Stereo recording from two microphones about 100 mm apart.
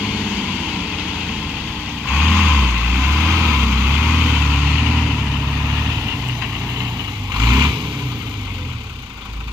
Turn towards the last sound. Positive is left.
turn(degrees=-25)  # may be behind; listen again after turning